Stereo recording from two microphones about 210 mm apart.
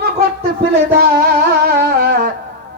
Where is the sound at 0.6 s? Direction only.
45° right (ahead or behind).